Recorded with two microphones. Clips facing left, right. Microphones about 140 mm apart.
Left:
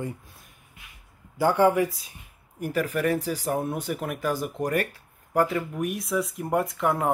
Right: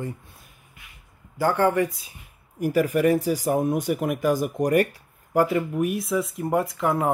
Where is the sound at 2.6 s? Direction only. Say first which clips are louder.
Right 5 dB; 10° right (ahead or behind).